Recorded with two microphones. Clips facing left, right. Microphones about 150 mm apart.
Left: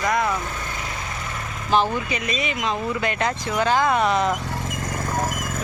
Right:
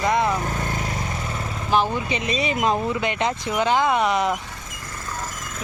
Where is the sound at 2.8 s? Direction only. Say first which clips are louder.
Right 1 dB; 20° right (ahead or behind).